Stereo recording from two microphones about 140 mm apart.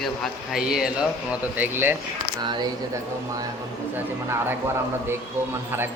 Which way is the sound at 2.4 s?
35° right (ahead or behind).